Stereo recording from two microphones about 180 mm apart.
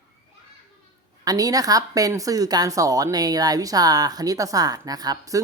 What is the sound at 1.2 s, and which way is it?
Speech, 20° right (ahead or behind).